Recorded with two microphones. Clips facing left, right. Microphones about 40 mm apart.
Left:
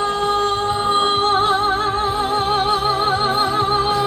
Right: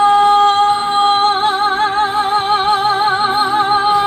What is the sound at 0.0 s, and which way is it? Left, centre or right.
Singing, right.